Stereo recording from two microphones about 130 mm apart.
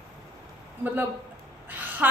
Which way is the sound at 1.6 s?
15° right (ahead or behind).